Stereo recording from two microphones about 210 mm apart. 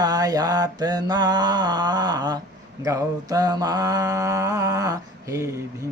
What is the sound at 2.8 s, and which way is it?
Mantra, 15° right (ahead or behind).